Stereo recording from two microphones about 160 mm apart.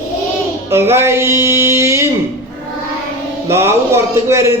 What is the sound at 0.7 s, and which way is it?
A man's voice, 15° right (ahead or behind).